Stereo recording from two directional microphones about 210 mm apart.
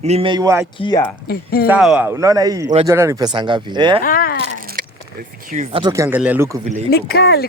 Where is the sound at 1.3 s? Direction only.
45° left (ahead or behind).